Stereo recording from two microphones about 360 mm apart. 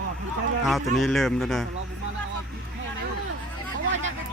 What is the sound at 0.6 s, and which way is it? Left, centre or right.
Speech, centre.